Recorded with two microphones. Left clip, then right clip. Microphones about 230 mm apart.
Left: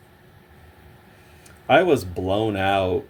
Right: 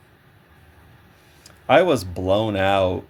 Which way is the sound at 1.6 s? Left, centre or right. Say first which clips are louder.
Right 1 dB; right.